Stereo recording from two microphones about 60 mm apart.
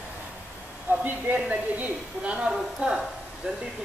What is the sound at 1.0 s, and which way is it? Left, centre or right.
Speech, right.